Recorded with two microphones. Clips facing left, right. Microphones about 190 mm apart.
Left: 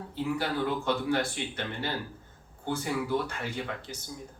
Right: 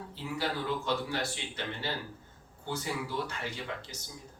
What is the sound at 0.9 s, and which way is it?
A man's voice, 55° left (ahead or behind).